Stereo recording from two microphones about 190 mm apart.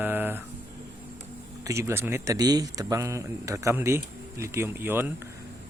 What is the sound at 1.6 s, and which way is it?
Speech, 15° right (ahead or behind).